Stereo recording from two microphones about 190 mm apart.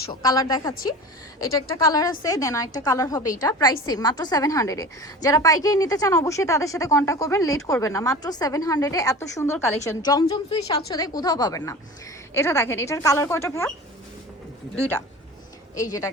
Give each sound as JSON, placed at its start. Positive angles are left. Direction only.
{"t": 0.1, "sound": "a woman's voice", "side_deg": 20}
{"t": 15.7, "sound": "a woman's voice", "side_deg": 15}